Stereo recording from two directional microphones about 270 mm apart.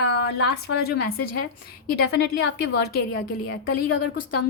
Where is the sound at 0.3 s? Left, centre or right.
Left.